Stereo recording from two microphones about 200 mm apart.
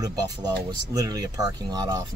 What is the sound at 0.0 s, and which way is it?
Speech, 20° right (ahead or behind).